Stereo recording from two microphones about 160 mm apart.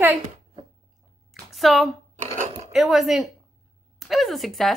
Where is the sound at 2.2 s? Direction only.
50° right (ahead or behind).